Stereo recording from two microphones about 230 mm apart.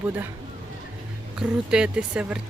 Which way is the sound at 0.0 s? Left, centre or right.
Centre.